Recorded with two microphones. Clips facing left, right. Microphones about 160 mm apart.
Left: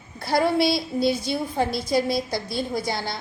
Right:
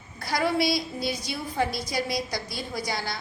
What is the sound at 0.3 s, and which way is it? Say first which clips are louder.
A woman's voice: left 4 dB; 25° left (ahead or behind).